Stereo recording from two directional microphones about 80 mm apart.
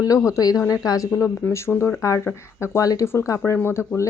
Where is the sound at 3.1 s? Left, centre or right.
Left.